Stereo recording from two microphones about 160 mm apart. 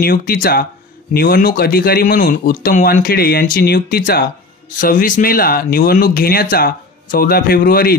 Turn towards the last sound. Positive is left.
turn(degrees=65)  # may be behind; listen again after turning